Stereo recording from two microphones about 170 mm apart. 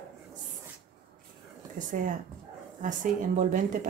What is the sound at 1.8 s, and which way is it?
A woman's voice, 50° right (ahead or behind).